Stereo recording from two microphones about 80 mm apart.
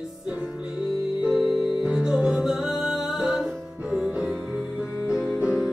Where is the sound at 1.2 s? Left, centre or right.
Centre.